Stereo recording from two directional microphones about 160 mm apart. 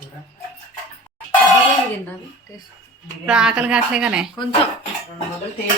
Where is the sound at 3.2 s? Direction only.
5° right (ahead or behind).